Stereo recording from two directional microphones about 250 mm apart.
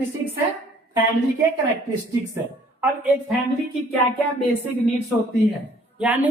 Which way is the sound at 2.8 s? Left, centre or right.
Centre.